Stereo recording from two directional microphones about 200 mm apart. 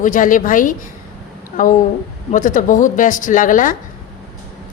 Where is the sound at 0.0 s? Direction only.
40° left (ahead or behind).